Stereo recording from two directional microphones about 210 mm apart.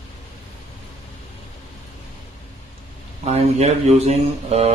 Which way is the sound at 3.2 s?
30° right (ahead or behind).